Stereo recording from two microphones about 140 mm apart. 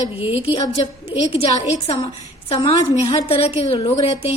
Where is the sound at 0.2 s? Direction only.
45° left (ahead or behind).